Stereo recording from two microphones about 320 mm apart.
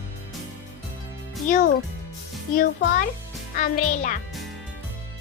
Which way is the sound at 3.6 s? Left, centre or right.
Left.